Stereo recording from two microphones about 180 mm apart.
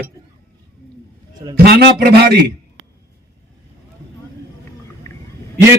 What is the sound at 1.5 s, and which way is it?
Speech, 60° right (ahead or behind).